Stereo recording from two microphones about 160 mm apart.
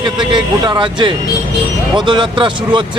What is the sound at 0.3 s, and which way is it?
Speech, 30° right (ahead or behind).